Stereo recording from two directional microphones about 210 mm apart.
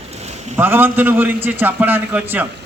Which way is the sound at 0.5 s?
10° right (ahead or behind).